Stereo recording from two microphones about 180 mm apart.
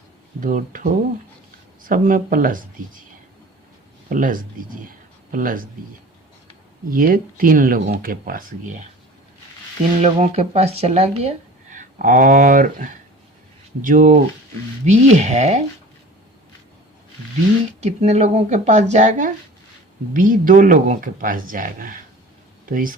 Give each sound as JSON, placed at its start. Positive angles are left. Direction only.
{"t": 0.3, "sound": "speech", "side_deg": -50}
{"t": 4.1, "sound": "speech", "side_deg": -50}
{"t": 4.9, "sound": "a sound", "side_deg": -50}
{"t": 6.9, "sound": "speech", "side_deg": -50}
{"t": 10.0, "sound": "speech", "side_deg": -35}
{"t": 17.8, "sound": "speech", "side_deg": -35}